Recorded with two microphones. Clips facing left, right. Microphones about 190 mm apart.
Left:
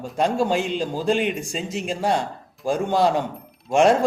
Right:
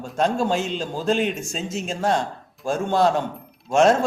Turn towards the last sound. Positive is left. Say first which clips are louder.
# even
turn(degrees=10)  # may be behind; listen again after turning